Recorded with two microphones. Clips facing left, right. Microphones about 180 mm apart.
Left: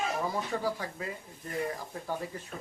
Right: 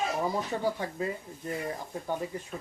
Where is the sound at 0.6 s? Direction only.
25° right (ahead or behind).